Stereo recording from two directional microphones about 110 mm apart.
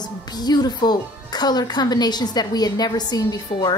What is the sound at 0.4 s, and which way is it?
A woman's voice, 40° left (ahead or behind).